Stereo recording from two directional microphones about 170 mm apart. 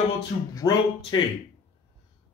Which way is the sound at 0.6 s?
20° left (ahead or behind).